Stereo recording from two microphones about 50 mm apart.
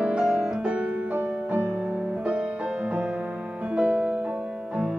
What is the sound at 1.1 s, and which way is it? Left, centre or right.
Music, right.